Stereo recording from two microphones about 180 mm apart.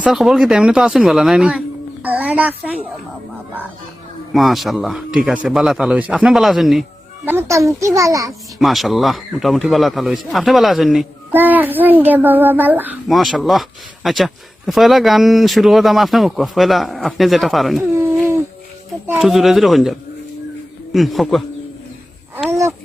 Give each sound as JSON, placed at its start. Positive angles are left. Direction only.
{"t": 0.0, "sound": "a child's voice", "side_deg": 0}
{"t": 4.4, "sound": "speech", "side_deg": 0}
{"t": 7.3, "sound": "a child's voice", "side_deg": -15}
{"t": 8.3, "sound": "speech", "side_deg": 0}
{"t": 19.1, "sound": "speech", "side_deg": 0}
{"t": 22.4, "sound": "a child's voice", "side_deg": -15}